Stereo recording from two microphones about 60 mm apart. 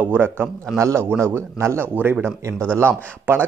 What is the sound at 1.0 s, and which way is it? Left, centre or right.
Speech, right.